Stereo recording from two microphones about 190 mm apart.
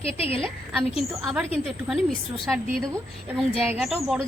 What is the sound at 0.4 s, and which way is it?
Speech, centre (ahead or behind).